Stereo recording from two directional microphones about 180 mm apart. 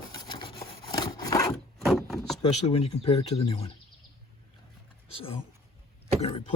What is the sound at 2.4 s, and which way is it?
Speech, 30° left (ahead or behind).